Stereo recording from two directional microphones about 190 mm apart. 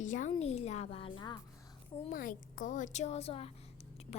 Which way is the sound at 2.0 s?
45° left (ahead or behind).